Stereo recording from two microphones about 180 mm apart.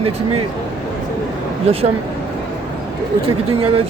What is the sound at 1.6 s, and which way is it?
Speech, 35° right (ahead or behind).